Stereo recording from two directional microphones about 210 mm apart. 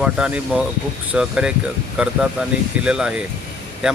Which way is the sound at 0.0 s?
5° right (ahead or behind).